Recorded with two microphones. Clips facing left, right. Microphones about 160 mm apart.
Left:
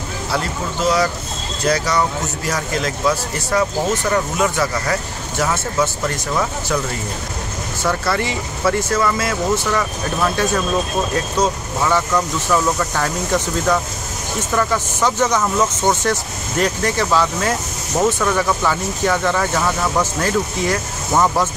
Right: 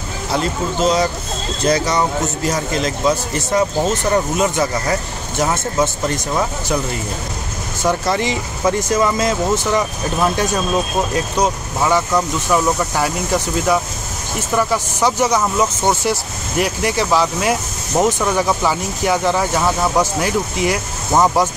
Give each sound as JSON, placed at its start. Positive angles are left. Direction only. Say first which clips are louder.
{"t": 0.3, "sound": "speech", "louder": "right 4 dB", "side_deg": -20}
{"t": 7.8, "sound": "speech", "louder": "right 2 dB", "side_deg": -15}